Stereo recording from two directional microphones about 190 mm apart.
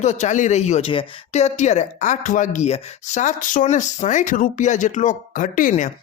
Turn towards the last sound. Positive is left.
turn(degrees=40)  # may be behind; listen again after turning